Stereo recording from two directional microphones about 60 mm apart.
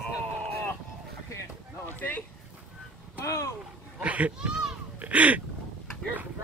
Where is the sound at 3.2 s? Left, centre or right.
Left.